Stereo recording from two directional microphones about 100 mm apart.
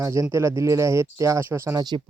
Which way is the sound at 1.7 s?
45° right (ahead or behind).